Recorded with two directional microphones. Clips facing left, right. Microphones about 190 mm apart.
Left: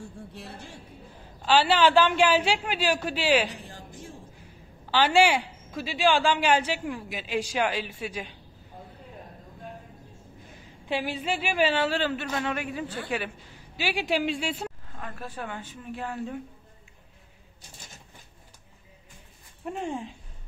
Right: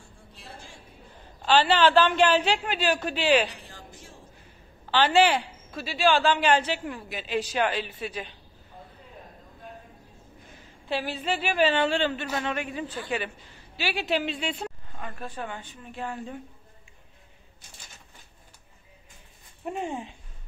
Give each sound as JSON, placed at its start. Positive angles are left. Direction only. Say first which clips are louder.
{"t": 0.3, "sound": "a sound", "louder": "left 5 dB", "side_deg": 65}
{"t": 1.4, "sound": "a woman's voice", "louder": "even", "side_deg": 10}
{"t": 4.9, "sound": "a woman's voice", "louder": "even", "side_deg": 10}
{"t": 10.9, "sound": "a woman's voice", "louder": "even", "side_deg": 10}
{"t": 19.6, "sound": "speech", "louder": "even", "side_deg": -5}